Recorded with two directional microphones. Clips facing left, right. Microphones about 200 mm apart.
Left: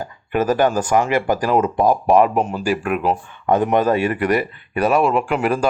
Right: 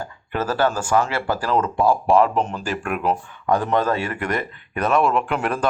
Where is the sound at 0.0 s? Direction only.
15° left (ahead or behind).